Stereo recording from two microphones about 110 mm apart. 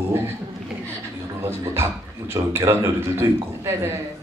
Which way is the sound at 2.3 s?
25° right (ahead or behind).